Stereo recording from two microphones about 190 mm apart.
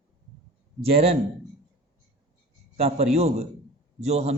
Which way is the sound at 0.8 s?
30° right (ahead or behind).